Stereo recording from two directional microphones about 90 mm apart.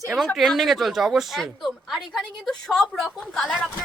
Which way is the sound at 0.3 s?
Centre (ahead or behind).